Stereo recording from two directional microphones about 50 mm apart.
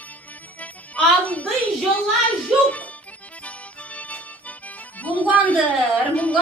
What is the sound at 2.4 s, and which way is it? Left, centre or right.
Speech, left.